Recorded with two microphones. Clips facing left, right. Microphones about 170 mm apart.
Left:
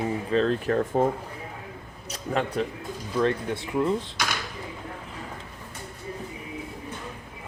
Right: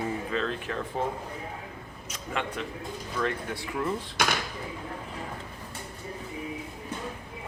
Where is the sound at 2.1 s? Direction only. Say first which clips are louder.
Left 6 dB; 40° left (ahead or behind).